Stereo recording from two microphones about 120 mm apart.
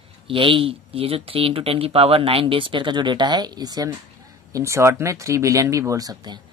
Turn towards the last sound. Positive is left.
turn(degrees=-30)  # may be behind; listen again after turning